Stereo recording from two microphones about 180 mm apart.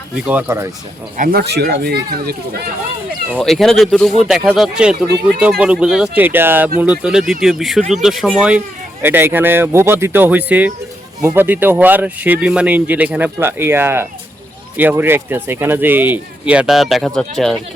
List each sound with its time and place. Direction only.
0.3 s speech: 10° right (ahead or behind)
1.1 s speech: 55° right (ahead or behind)
3.3 s speech: centre (ahead or behind)